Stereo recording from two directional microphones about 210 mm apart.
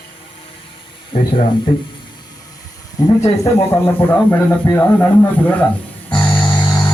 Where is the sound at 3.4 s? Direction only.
10° left (ahead or behind).